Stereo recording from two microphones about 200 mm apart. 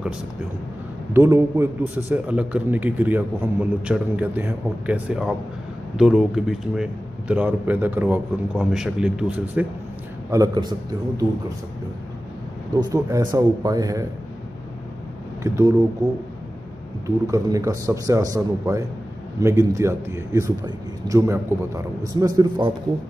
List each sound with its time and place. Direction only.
1.1 s a man's voice: 15° right (ahead or behind)
10.3 s a man's voice: 20° right (ahead or behind)
12.9 s a man's voice: 20° right (ahead or behind)
15.4 s a man's voice: 15° right (ahead or behind)